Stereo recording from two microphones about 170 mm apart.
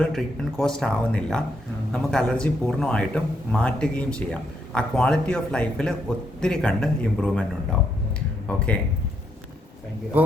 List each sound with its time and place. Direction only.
0.0 s speech: centre (ahead or behind)
8.4 s speech: 5° left (ahead or behind)
10.1 s speech: 10° right (ahead or behind)